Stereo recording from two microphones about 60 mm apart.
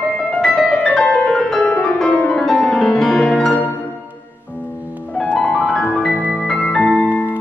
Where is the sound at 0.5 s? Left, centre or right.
Left.